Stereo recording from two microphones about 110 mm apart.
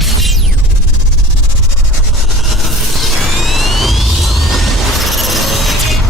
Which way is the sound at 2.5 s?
Centre (ahead or behind).